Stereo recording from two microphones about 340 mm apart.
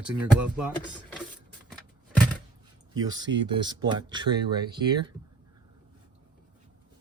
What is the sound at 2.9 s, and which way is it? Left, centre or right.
Speech, centre.